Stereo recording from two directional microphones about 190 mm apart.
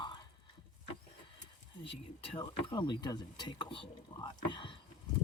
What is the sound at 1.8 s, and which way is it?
Speech, 30° left (ahead or behind).